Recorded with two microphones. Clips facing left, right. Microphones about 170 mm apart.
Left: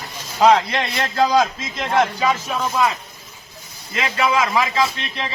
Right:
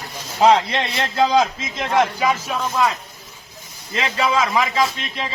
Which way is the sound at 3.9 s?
30° right (ahead or behind).